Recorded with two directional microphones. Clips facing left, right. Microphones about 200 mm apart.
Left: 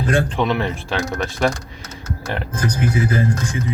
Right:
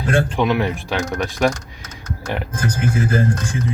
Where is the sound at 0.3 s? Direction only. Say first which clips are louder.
Right 2 dB; 5° right (ahead or behind).